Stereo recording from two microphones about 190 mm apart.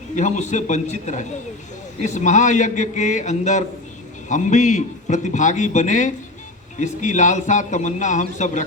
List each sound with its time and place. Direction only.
0.2 s a man's voice: 40° left (ahead or behind)